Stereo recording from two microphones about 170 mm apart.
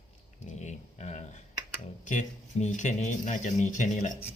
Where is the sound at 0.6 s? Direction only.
45° left (ahead or behind).